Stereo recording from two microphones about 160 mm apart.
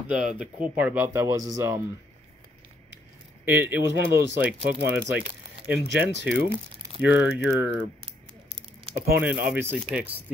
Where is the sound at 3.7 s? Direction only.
15° right (ahead or behind).